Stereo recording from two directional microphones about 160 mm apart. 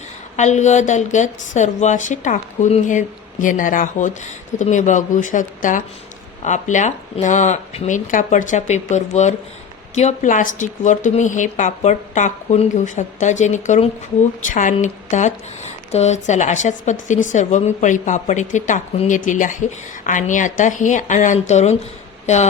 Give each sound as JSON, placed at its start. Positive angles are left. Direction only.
{"t": 0.3, "sound": "a woman's voice", "side_deg": 45}